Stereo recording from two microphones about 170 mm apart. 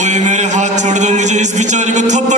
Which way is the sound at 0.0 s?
45° right (ahead or behind).